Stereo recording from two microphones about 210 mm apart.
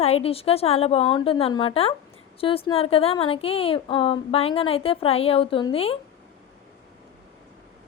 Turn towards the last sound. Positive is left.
turn(degrees=25)  # may be behind; listen again after turning